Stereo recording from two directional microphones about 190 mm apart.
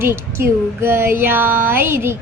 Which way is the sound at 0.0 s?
15° right (ahead or behind).